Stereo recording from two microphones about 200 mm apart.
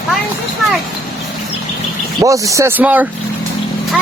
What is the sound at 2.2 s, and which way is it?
Speech, 15° right (ahead or behind).